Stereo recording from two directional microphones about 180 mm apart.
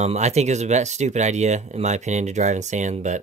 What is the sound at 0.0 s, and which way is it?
Speech, 35° right (ahead or behind).